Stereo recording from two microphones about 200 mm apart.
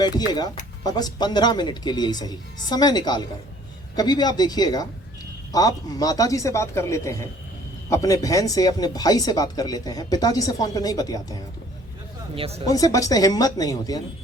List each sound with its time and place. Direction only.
0.9 s speech: 20° left (ahead or behind)
12.4 s speech: 30° right (ahead or behind)
12.6 s speech: 15° left (ahead or behind)